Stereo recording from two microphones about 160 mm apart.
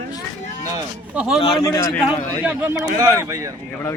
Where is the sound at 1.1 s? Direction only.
5° right (ahead or behind).